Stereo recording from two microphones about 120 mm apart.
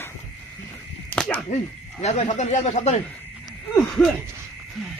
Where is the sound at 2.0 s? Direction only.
70° left (ahead or behind).